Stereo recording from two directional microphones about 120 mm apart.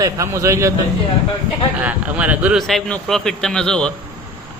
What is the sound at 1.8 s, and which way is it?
Speech, 10° right (ahead or behind).